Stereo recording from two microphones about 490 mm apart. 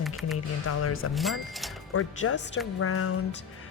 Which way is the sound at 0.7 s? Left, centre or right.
Left.